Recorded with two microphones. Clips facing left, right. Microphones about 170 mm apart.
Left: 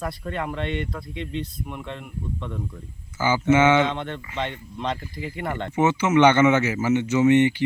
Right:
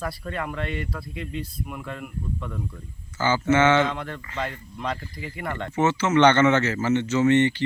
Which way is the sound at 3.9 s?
25° left (ahead or behind).